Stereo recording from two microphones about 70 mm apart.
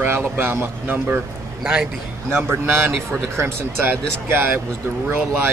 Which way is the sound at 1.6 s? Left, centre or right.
Centre.